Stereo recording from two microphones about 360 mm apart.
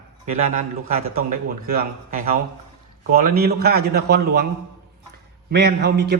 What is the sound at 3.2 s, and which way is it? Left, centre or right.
Speech, right.